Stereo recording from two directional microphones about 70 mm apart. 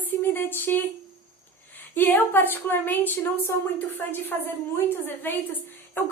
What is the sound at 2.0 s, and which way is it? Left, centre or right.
A woman's voice, left.